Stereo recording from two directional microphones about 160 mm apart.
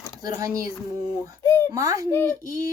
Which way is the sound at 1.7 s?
20° right (ahead or behind).